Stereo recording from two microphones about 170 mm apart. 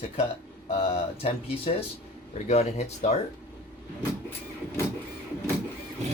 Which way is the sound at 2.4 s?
40° left (ahead or behind).